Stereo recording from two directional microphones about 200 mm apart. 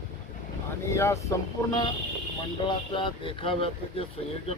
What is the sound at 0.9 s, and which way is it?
Speech, 15° left (ahead or behind).